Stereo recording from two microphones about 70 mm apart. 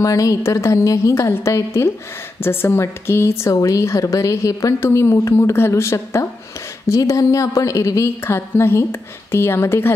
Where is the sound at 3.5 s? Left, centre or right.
Left.